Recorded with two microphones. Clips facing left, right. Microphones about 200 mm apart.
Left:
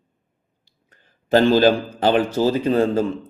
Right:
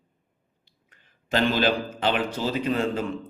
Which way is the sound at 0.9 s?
35° left (ahead or behind).